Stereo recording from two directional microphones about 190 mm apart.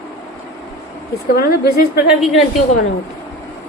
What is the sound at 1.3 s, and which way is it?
Speech, 55° left (ahead or behind).